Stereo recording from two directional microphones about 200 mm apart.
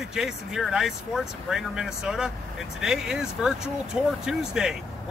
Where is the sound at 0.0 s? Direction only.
5° right (ahead or behind).